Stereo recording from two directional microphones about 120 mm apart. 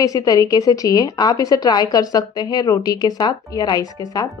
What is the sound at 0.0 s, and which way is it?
A woman's voice, 30° left (ahead or behind).